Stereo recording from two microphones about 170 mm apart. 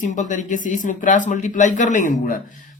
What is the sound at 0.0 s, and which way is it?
Speech, 45° left (ahead or behind).